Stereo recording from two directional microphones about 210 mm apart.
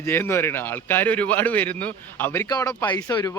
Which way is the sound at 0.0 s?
10° left (ahead or behind).